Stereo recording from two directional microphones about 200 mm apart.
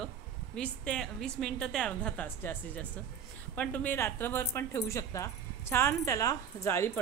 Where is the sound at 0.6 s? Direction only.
5° left (ahead or behind).